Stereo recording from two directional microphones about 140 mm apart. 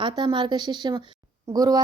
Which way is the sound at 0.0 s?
35° right (ahead or behind).